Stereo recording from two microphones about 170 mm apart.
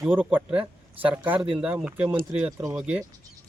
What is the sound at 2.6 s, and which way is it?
Speech, 20° right (ahead or behind).